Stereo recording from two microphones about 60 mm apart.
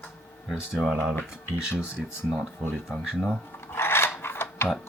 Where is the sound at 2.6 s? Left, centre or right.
Centre.